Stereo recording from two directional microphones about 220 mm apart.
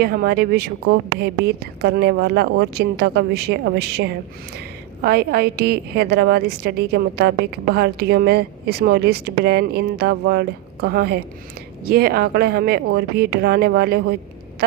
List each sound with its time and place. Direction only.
0.0 s a woman's voice: 45° right (ahead or behind)